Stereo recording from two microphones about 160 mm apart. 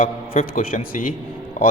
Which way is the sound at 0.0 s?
60° left (ahead or behind).